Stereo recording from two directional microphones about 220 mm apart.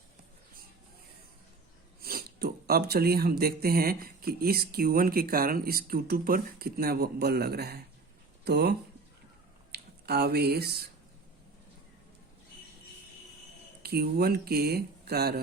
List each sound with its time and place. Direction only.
2.0 s speech: 45° right (ahead or behind)
9.7 s speech: 45° right (ahead or behind)
13.8 s speech: 45° right (ahead or behind)